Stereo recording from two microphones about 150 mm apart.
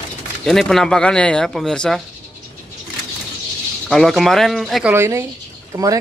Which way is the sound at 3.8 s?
Centre (ahead or behind).